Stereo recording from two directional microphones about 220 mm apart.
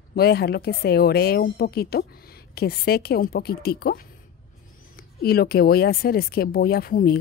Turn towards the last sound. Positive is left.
turn(degrees=40)  # may be behind; listen again after turning